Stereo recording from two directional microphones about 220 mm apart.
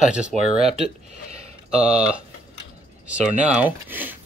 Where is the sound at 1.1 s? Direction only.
30° right (ahead or behind).